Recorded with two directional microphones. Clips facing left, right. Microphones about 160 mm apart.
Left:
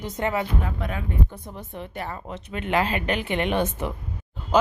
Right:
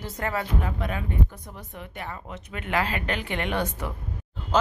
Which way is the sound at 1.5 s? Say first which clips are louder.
Left 5 dB; 30° left (ahead or behind).